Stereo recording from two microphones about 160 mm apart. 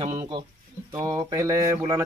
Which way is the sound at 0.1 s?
25° right (ahead or behind).